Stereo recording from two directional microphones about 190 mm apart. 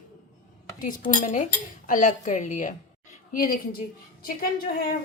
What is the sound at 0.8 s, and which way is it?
A woman's voice, 45° left (ahead or behind).